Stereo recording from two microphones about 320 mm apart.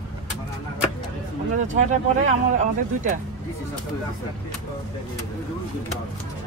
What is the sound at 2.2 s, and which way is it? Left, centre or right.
Speech, right.